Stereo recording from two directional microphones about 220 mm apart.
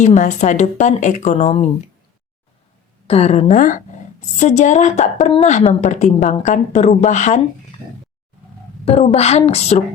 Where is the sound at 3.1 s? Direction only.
30° left (ahead or behind).